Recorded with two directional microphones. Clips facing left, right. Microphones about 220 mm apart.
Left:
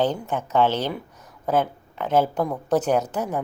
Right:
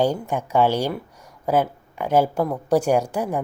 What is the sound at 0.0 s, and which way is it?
A woman's voice, 10° right (ahead or behind).